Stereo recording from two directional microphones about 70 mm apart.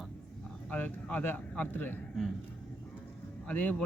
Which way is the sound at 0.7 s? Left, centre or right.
Left.